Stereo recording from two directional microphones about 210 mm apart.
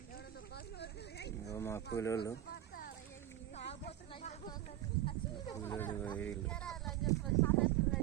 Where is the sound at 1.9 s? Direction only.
15° left (ahead or behind).